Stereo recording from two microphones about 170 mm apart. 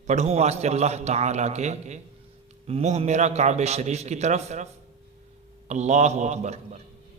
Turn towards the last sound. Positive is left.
turn(degrees=-40)  # may be behind; listen again after turning